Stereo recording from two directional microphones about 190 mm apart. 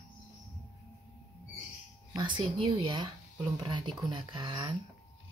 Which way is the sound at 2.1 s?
25° right (ahead or behind).